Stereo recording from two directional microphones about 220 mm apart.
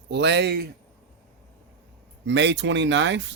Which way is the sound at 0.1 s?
50° right (ahead or behind).